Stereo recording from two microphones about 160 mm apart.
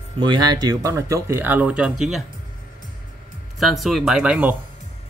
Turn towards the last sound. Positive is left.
turn(degrees=-5)  # may be behind; listen again after turning